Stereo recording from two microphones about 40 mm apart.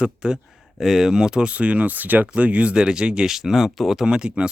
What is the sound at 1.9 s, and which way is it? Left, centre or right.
Speech, right.